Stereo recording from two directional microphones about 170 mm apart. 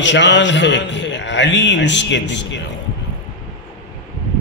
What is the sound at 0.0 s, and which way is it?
A man's voice, 90° left.